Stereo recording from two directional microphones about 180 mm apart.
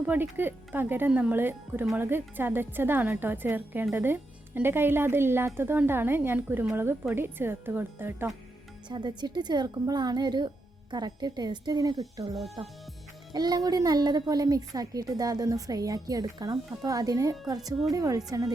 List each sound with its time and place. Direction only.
0.0 s speech: 10° right (ahead or behind)
8.9 s a woman's voice: 25° right (ahead or behind)